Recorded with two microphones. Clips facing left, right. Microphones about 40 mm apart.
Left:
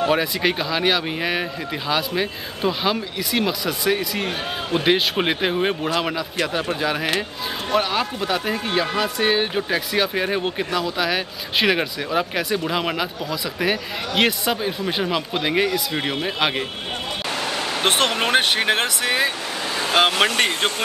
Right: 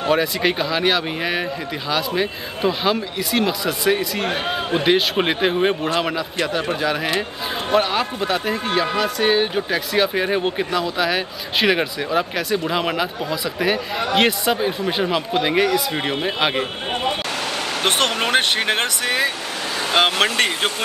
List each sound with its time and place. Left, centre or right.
0.1 s speech: centre
4.3 s a man's voice: right
4.8 s speech: centre
17.5 s vehicle: left
17.8 s speech: centre
19.9 s speech: centre